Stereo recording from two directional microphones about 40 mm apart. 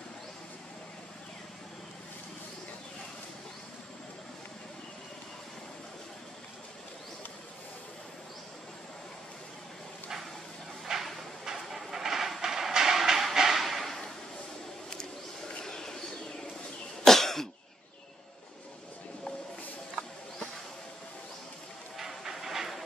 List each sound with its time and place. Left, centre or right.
10.9 s train: centre
13.3 s a sound: centre
14.9 s bird: centre
17.0 s cough: centre
21.9 s train: centre